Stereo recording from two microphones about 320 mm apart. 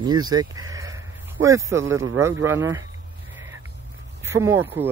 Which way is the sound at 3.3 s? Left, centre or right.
Centre.